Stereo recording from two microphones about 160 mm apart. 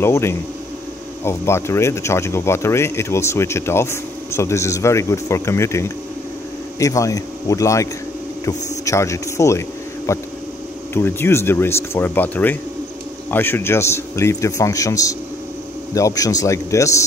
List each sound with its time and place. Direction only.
0.0 s a man's voice: 15° left (ahead or behind)